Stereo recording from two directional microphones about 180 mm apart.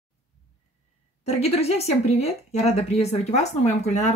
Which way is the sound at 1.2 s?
35° left (ahead or behind).